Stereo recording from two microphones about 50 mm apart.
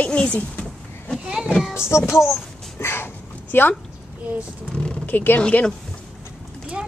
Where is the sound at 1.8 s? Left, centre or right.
Left.